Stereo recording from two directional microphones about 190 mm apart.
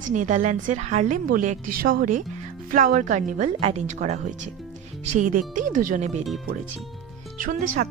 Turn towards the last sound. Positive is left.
turn(degrees=-45)  # may be behind; listen again after turning